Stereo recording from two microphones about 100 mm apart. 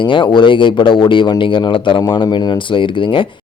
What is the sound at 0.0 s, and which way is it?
Speech, 55° left (ahead or behind).